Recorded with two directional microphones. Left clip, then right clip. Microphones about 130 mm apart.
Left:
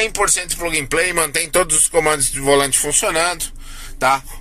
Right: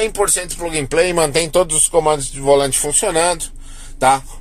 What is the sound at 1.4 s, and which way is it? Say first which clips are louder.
Speech: right 2 dB; 25° right (ahead or behind).